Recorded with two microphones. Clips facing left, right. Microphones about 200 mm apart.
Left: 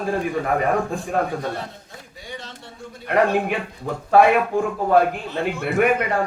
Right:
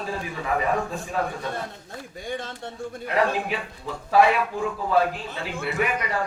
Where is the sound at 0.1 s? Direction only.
55° left (ahead or behind).